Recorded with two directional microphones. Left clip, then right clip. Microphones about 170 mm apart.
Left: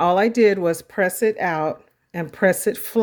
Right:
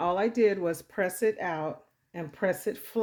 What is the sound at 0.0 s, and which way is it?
Speech, 40° left (ahead or behind).